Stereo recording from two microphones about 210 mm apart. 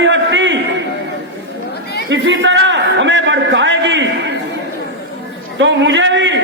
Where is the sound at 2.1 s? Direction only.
60° right (ahead or behind).